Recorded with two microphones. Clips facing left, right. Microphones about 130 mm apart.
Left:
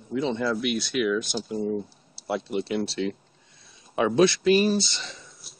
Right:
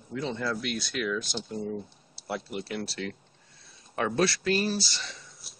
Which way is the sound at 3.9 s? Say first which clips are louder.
Left 6 dB; 10° left (ahead or behind).